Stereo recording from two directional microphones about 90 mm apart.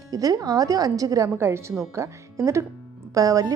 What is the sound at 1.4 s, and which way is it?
Speech, 30° right (ahead or behind).